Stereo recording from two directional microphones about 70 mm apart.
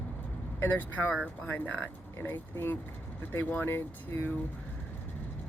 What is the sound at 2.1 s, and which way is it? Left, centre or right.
Speech, left.